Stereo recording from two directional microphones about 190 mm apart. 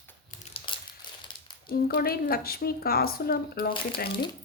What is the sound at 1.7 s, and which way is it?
A woman's voice, 50° left (ahead or behind).